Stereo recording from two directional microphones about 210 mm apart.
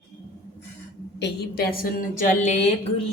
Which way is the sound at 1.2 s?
50° left (ahead or behind).